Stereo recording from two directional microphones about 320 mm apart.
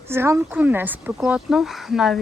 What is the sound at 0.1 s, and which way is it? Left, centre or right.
Speech, centre.